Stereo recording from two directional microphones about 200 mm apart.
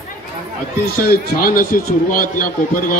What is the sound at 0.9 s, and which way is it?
A man's voice, 50° left (ahead or behind).